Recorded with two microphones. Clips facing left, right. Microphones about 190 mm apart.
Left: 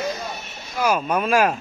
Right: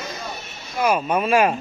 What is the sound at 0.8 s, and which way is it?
Speech, centre (ahead or behind).